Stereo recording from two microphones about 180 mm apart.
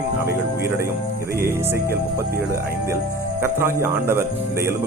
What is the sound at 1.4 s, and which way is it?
Speech, 15° right (ahead or behind).